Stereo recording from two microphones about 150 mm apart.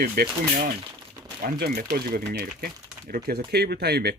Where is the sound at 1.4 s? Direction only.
75° right (ahead or behind).